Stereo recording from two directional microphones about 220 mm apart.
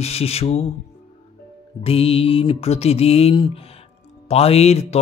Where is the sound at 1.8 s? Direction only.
25° left (ahead or behind).